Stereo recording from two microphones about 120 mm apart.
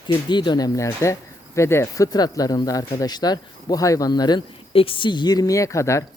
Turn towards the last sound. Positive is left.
turn(degrees=25)  # may be behind; listen again after turning